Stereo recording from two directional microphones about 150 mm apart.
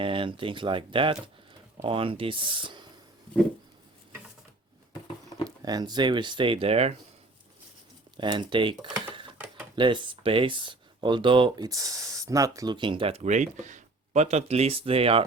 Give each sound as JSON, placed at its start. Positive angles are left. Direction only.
{"t": 0.0, "sound": "speech", "side_deg": -35}
{"t": 5.5, "sound": "speech", "side_deg": -25}
{"t": 8.1, "sound": "speech", "side_deg": -30}
{"t": 8.9, "sound": "dishes", "side_deg": -10}
{"t": 9.7, "sound": "speech", "side_deg": -35}